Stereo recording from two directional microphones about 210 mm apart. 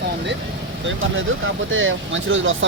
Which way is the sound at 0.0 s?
55° right (ahead or behind).